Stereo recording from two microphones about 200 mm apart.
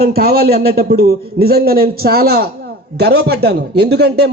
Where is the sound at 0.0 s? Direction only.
50° right (ahead or behind).